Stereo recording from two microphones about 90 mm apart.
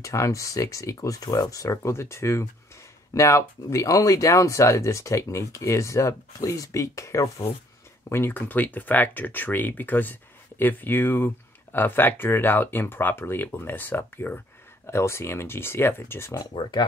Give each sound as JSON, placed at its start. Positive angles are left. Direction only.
{"t": 0.0, "sound": "speech", "side_deg": 35}
{"t": 8.1, "sound": "speech", "side_deg": 25}